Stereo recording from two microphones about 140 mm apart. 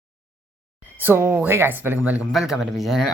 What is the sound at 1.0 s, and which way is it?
Speech, 15° right (ahead or behind).